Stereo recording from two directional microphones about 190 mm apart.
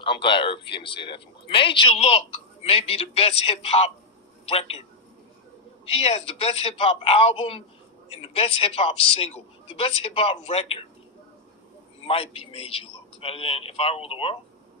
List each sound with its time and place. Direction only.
0.0 s a man's voice: 25° left (ahead or behind)
5.9 s a man's voice: 35° left (ahead or behind)
12.1 s speech: 30° left (ahead or behind)